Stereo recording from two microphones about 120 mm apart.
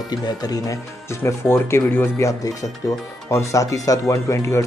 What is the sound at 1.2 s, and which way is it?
Speech, 20° left (ahead or behind).